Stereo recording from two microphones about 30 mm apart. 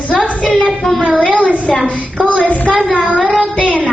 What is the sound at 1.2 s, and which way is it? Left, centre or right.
Speech, left.